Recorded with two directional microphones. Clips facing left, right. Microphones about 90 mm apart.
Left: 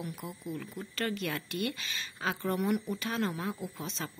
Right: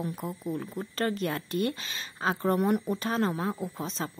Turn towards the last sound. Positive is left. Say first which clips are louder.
# right 5 dB
turn(degrees=-35)  # may be behind; listen again after turning